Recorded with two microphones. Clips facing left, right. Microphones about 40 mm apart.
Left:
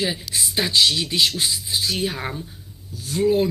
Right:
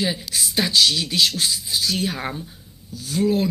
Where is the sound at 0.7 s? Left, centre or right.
Centre.